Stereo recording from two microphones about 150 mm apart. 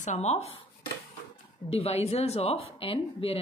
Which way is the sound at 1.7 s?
40° left (ahead or behind).